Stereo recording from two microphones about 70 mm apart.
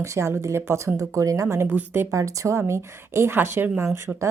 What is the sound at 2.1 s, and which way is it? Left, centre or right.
A woman's voice, right.